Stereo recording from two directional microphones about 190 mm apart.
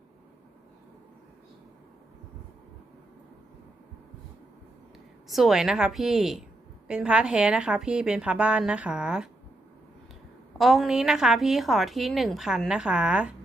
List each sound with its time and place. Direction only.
5.3 s a woman's voice: centre (ahead or behind)
10.6 s a woman's voice: centre (ahead or behind)